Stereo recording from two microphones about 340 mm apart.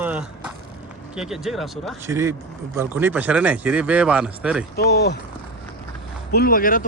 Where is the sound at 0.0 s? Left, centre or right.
Centre.